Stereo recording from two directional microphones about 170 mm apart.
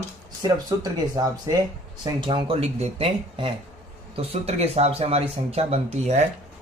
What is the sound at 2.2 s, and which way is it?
Speech, 30° right (ahead or behind).